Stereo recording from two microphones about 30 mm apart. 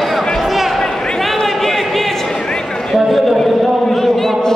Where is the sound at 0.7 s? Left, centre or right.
Centre.